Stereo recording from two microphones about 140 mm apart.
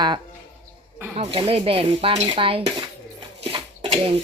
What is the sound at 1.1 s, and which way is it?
Speech, 45° right (ahead or behind).